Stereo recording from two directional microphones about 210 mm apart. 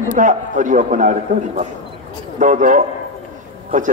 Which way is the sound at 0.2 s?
35° right (ahead or behind).